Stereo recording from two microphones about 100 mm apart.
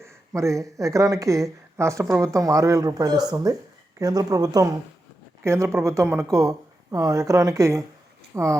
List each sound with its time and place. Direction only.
0.0 s speech: 30° right (ahead or behind)